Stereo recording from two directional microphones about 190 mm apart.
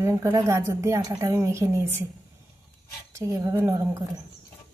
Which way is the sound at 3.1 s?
15° right (ahead or behind).